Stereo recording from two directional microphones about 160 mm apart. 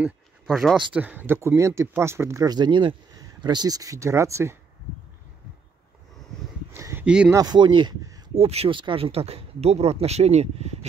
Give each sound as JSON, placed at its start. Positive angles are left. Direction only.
{"t": 0.0, "sound": "speech", "side_deg": -5}
{"t": 6.7, "sound": "a sound", "side_deg": -15}
{"t": 7.1, "sound": "speech", "side_deg": -5}
{"t": 7.3, "sound": "speech", "side_deg": -25}
{"t": 8.4, "sound": "speech", "side_deg": -40}